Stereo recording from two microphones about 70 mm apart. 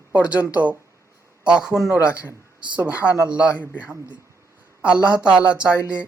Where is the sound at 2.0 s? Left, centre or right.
Right.